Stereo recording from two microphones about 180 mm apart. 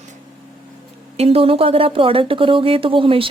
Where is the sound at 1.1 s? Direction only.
35° right (ahead or behind).